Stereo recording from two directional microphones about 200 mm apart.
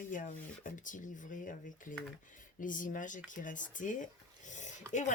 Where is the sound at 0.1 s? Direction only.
40° left (ahead or behind).